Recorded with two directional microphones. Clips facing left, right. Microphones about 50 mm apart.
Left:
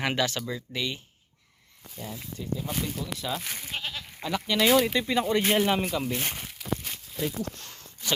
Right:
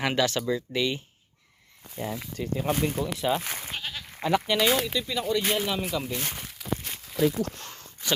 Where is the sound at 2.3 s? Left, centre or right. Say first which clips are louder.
Right 2 dB; right.